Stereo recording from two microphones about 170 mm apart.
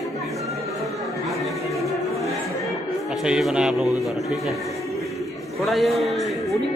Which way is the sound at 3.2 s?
5° right (ahead or behind).